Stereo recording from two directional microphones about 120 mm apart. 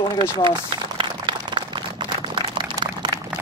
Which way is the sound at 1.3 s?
40° right (ahead or behind).